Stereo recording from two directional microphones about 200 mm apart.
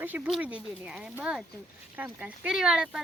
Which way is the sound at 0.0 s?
10° right (ahead or behind).